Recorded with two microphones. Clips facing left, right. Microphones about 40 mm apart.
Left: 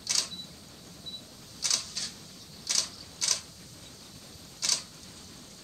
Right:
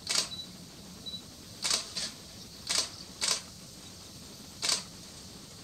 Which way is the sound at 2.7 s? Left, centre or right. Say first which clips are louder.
Even; right.